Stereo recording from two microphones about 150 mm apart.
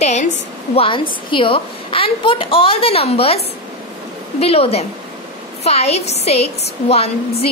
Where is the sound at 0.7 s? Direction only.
35° left (ahead or behind).